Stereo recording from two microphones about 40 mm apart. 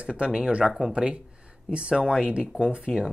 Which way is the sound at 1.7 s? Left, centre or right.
Right.